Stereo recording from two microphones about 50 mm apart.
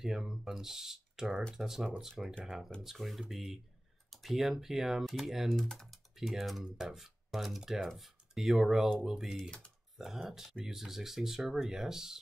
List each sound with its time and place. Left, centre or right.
0.0 s speech: centre
5.5 s speech: centre
6.1 s speech: centre
6.6 s speech: centre
9.4 s speech: centre
9.9 s speech: centre